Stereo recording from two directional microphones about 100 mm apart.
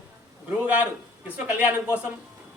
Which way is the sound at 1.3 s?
15° right (ahead or behind).